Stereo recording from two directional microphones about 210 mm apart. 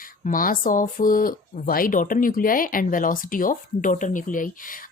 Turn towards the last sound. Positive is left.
turn(degrees=40)  # may be behind; listen again after turning